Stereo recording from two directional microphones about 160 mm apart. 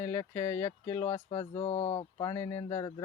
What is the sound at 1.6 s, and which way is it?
Speech, 40° left (ahead or behind).